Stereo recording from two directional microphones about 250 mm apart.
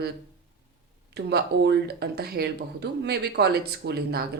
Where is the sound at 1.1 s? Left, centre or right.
Right.